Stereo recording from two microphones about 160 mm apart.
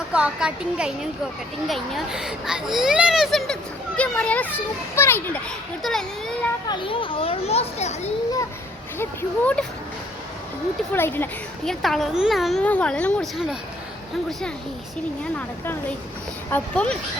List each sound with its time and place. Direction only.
0.1 s a child's voice: 5° right (ahead or behind); by 5.4 s 15° left (ahead or behind)
5.8 s a child's voice: 5° left (ahead or behind)
6.7 s a child's voice: 30° left (ahead or behind)
9.0 s speech: 10° left (ahead or behind)
10.9 s a child's voice: 15° left (ahead or behind)
15.4 s speech: 10° left (ahead or behind)